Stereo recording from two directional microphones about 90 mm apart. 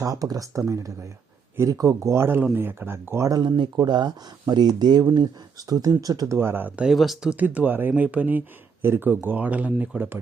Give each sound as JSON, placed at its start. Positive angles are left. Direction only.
{"t": 0.0, "sound": "speech", "side_deg": -40}
{"t": 3.8, "sound": "speech", "side_deg": -55}
{"t": 6.3, "sound": "speech", "side_deg": -25}
{"t": 6.8, "sound": "speech", "side_deg": 0}